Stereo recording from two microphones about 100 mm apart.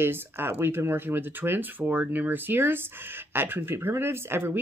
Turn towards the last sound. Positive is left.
turn(degrees=-25)  # may be behind; listen again after turning